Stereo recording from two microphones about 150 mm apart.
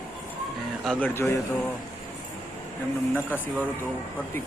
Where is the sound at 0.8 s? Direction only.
5° left (ahead or behind).